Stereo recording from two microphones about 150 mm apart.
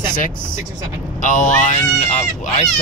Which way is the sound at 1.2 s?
55° left (ahead or behind).